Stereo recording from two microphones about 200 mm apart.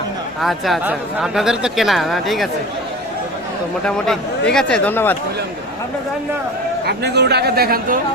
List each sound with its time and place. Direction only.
0.4 s speech: centre (ahead or behind)
3.8 s speech: 5° left (ahead or behind)
6.8 s speech: 55° right (ahead or behind)